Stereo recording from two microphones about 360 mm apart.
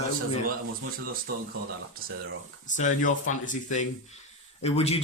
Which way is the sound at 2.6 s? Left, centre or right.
Left.